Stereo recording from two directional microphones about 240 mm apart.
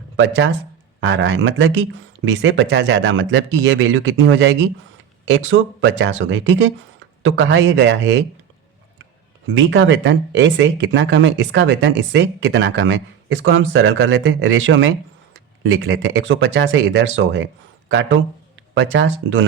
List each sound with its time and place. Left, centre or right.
0.2 s speech: right
9.6 s speech: right